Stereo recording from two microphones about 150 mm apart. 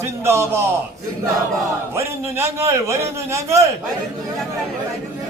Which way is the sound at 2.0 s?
20° right (ahead or behind).